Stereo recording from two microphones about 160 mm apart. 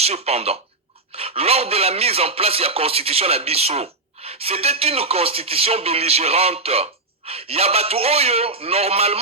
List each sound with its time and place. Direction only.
0.0 s speech: 40° right (ahead or behind)